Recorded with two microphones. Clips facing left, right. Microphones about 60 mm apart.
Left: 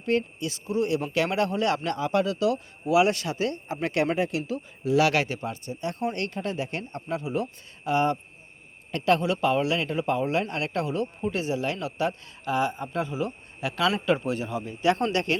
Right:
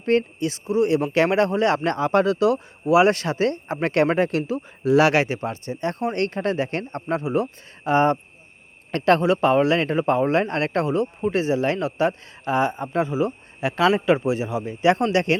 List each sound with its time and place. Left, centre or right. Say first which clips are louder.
0.0 s speech: right 5 dB; right
7.3 s speech: right 6 dB; right
9.2 s speech: right 6 dB; right
13.1 s speech: right 7 dB; right